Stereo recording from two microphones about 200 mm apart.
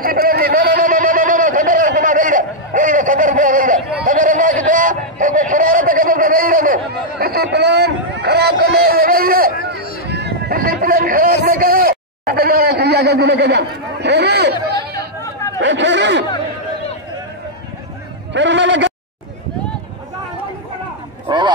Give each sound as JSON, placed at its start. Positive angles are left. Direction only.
{"t": 0.0, "sound": "a sound", "side_deg": -45}
{"t": 15.6, "sound": "chatter", "side_deg": -65}
{"t": 18.3, "sound": "bleat", "side_deg": -65}
{"t": 21.3, "sound": "honk", "side_deg": -20}